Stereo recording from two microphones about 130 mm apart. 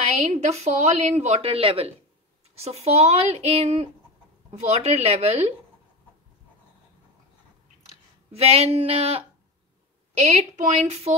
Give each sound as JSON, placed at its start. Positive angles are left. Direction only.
{"t": 0.3, "sound": "speech", "side_deg": -55}
{"t": 8.3, "sound": "speech", "side_deg": -50}
{"t": 10.1, "sound": "speech", "side_deg": -60}